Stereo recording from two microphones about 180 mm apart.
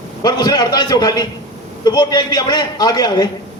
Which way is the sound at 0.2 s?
20° left (ahead or behind).